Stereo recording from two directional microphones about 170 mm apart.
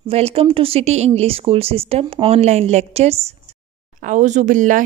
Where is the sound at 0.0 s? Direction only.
35° right (ahead or behind).